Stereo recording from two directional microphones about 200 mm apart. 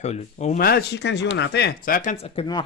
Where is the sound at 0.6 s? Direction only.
50° left (ahead or behind).